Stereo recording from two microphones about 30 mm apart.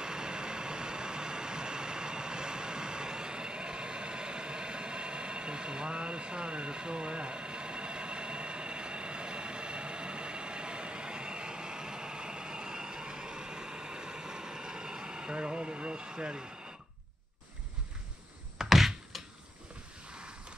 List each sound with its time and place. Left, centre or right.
0.0 s vehicle: right
16.2 s speech: right
18.6 s computer keyboard: centre